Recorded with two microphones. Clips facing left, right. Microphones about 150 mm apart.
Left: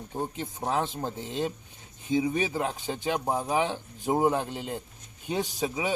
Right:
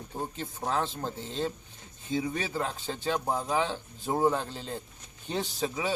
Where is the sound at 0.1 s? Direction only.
15° left (ahead or behind).